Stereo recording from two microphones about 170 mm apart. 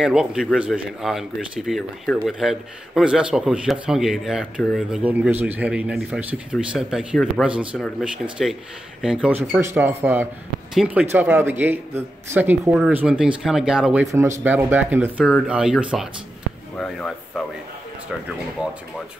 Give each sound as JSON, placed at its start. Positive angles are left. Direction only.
{"t": 0.0, "sound": "a man's voice", "side_deg": -5}
{"t": 5.0, "sound": "a man's voice", "side_deg": -10}
{"t": 14.0, "sound": "a man's voice", "side_deg": -15}